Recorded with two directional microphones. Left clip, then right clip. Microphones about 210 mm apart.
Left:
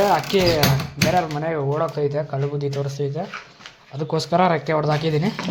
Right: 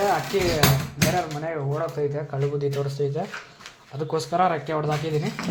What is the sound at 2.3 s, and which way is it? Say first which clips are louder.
Speech: left 1 dB; 10° left (ahead or behind).